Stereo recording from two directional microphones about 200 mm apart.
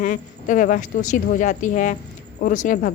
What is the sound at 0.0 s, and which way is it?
A woman's voice, 40° left (ahead or behind).